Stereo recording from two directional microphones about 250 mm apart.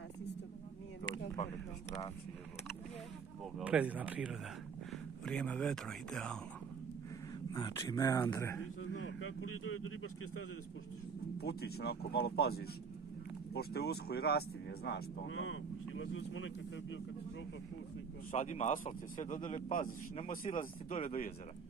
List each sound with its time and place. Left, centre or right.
3.5 s speech: centre
7.5 s speech: centre
8.9 s speech: left
11.3 s speech: left
18.3 s a man's voice: left